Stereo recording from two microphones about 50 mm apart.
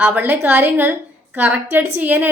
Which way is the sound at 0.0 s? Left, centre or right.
Right.